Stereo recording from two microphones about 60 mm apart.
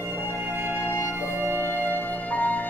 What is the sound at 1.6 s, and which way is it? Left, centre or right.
Music, left.